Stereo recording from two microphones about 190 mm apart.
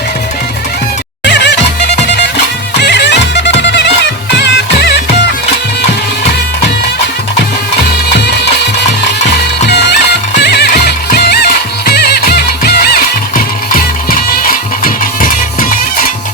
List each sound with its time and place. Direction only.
1.2 s music: 65° left (ahead or behind)
2.8 s music: 60° left (ahead or behind)
9.6 s music: 60° left (ahead or behind)